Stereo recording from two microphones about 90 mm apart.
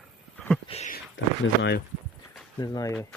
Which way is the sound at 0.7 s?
85° left.